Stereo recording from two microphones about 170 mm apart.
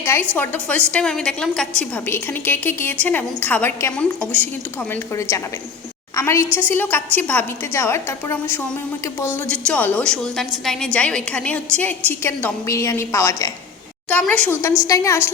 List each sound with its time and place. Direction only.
0.0 s a woman's voice: 15° left (ahead or behind)